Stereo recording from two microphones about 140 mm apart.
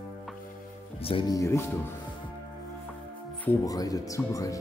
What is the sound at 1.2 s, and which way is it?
Speech, 25° left (ahead or behind).